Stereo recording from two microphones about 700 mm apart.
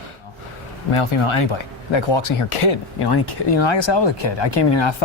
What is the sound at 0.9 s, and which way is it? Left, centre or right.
Speech, left.